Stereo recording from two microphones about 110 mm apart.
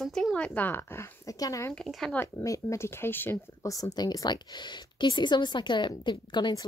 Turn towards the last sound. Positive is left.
turn(degrees=45)  # may be behind; listen again after turning